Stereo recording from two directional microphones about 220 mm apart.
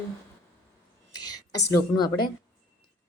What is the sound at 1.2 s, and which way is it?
A woman's voice, 15° left (ahead or behind).